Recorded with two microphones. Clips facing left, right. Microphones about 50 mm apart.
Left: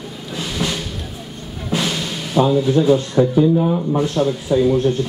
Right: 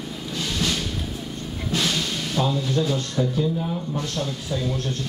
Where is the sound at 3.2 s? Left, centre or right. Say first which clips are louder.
Left 7 dB; left.